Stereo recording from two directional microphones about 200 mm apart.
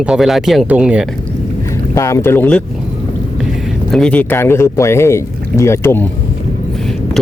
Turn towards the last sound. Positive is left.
turn(degrees=10)  # may be behind; listen again after turning